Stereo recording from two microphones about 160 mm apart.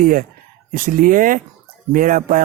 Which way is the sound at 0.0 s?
55° right (ahead or behind).